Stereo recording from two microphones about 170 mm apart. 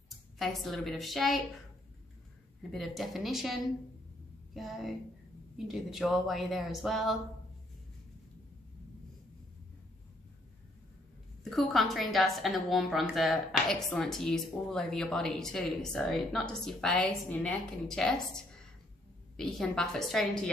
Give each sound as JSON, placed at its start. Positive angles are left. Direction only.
{"t": 0.4, "sound": "a woman's voice", "side_deg": 0}
{"t": 2.7, "sound": "a woman's voice", "side_deg": 0}
{"t": 11.4, "sound": "a woman's voice", "side_deg": 0}